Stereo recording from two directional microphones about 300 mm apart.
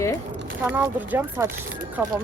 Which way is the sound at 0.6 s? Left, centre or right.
Centre.